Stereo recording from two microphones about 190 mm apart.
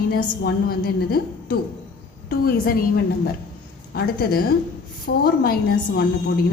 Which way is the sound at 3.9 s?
55° left (ahead or behind).